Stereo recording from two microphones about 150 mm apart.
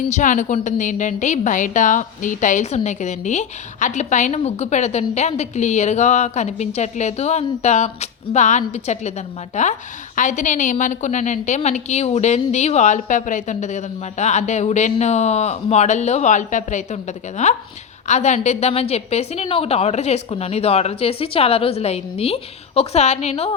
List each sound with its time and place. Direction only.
0.1 s a woman's voice: 55° left (ahead or behind)